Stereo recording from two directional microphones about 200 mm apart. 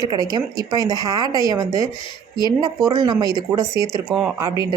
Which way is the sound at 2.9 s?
20° right (ahead or behind).